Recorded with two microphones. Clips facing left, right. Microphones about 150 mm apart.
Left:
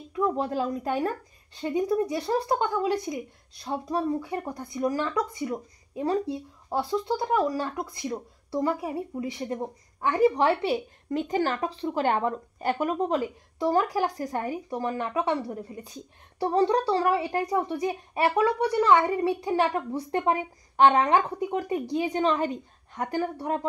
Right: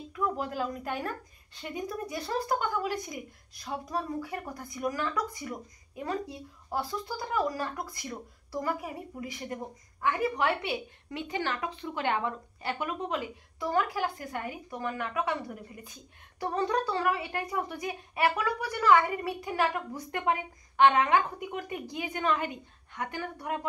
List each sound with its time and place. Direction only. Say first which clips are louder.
0.1 s a woman's voice: left 6 dB; 30° left (ahead or behind)